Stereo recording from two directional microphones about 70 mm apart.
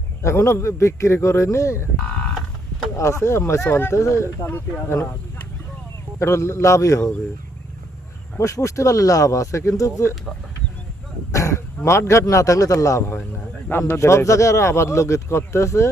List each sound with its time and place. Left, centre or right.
0.2 s speech: left
2.9 s speech: left
4.4 s speech: left
6.1 s speech: left
8.4 s speech: left
11.3 s throat clearing: left
11.8 s speech: left
13.7 s speech: left